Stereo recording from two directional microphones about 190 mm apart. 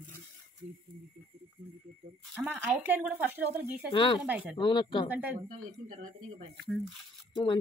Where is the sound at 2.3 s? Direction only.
10° right (ahead or behind).